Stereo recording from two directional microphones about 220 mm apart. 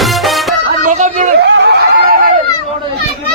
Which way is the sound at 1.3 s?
55° right (ahead or behind).